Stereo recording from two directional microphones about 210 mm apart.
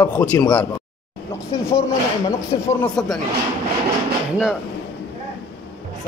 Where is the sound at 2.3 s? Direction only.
15° left (ahead or behind).